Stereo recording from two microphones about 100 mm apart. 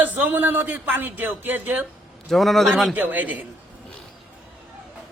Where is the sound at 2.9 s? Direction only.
15° right (ahead or behind).